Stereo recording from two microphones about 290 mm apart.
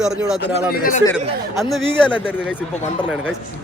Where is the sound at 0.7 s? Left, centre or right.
Left.